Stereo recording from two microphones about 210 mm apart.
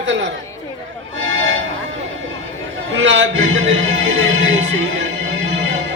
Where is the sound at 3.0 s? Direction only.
60° right (ahead or behind).